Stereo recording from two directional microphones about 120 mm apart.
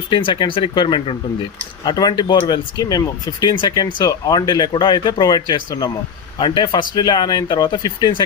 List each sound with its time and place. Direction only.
0.1 s speech: 40° left (ahead or behind)